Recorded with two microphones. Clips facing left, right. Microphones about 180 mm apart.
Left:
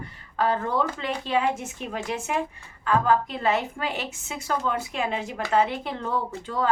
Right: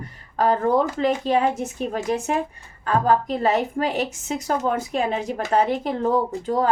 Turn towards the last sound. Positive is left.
turn(degrees=-40)  # may be behind; listen again after turning